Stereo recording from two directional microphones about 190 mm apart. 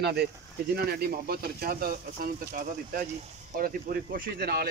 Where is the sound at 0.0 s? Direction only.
60° right (ahead or behind).